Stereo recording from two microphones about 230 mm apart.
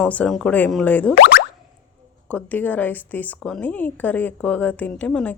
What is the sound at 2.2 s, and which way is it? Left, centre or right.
Speech, centre.